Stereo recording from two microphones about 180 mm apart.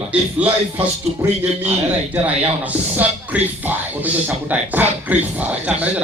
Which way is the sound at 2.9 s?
10° right (ahead or behind).